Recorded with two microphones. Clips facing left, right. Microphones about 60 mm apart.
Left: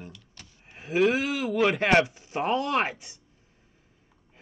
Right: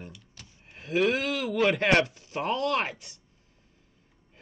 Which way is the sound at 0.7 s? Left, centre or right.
Centre.